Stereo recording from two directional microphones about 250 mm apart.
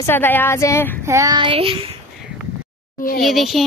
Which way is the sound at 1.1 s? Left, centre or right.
Centre.